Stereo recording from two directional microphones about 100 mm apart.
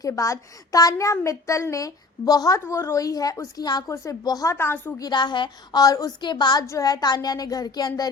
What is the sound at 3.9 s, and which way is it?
A woman's voice, 30° left (ahead or behind).